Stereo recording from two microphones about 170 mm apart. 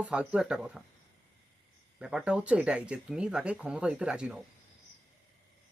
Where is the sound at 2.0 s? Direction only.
5° right (ahead or behind).